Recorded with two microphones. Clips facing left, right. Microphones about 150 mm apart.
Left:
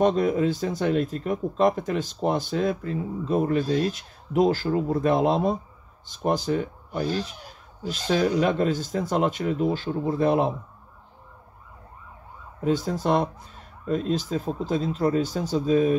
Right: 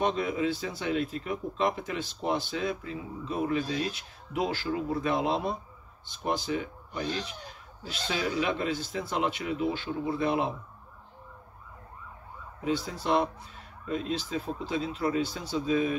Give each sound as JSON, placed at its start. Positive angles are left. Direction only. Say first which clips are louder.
{"t": 0.0, "sound": "speech", "louder": "left 7 dB", "side_deg": 45}
{"t": 12.6, "sound": "speech", "louder": "left 6 dB", "side_deg": 45}